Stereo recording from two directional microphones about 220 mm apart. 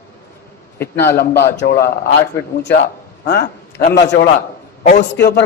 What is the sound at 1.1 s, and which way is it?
Speech, 45° left (ahead or behind).